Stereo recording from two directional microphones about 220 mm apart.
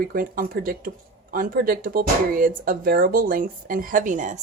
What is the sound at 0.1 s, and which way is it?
Speech, 40° right (ahead or behind).